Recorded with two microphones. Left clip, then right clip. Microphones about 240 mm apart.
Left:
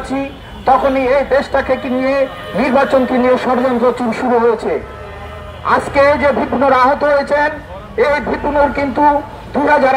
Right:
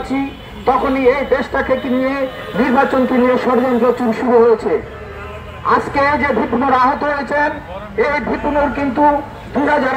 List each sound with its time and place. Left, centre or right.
0.7 s a man's voice: left
5.7 s a man's voice: left